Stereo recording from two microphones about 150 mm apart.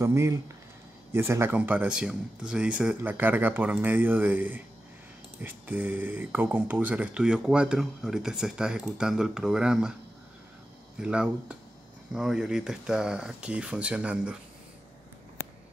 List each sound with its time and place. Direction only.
0.0 s speech: 20° right (ahead or behind)
11.0 s speech: 5° right (ahead or behind)